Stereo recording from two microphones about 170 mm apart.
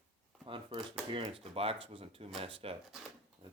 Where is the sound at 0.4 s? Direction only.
30° right (ahead or behind).